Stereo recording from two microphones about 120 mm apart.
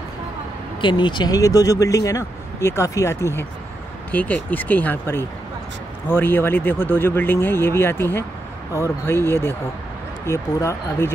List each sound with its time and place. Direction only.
0.7 s speech: 40° left (ahead or behind); by 11.1 s 25° left (ahead or behind)